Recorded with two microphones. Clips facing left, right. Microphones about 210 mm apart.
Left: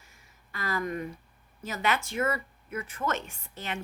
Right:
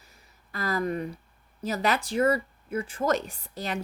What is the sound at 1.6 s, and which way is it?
Speech, 35° right (ahead or behind).